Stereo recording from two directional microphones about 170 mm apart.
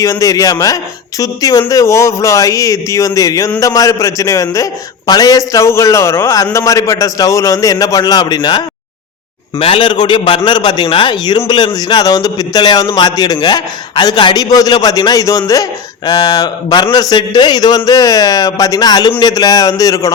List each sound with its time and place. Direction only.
0.0 s a man's voice: 20° left (ahead or behind)